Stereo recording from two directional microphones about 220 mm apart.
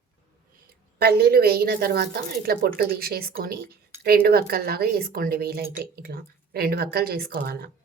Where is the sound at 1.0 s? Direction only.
45° right (ahead or behind).